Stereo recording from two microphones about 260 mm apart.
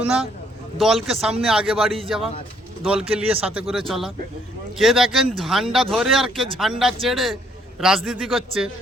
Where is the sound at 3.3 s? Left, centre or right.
Right.